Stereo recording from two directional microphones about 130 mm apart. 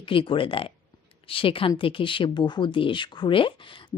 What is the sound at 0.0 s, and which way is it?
Speech, 40° left (ahead or behind).